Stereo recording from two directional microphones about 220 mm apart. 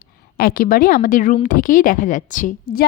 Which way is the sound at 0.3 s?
40° left (ahead or behind).